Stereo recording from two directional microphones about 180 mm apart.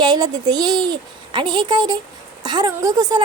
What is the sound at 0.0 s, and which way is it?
A woman's voice, 25° right (ahead or behind).